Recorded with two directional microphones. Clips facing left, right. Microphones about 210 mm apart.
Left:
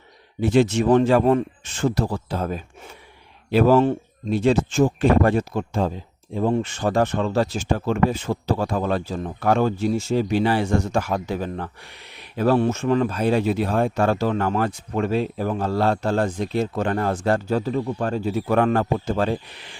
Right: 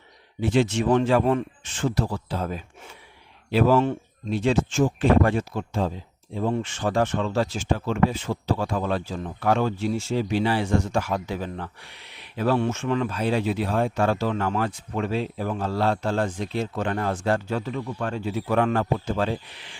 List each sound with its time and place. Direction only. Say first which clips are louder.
0.3 s speech: left 4 dB; 45° left (ahead or behind)